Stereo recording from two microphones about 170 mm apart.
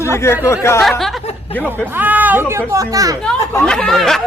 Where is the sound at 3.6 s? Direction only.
5° left (ahead or behind).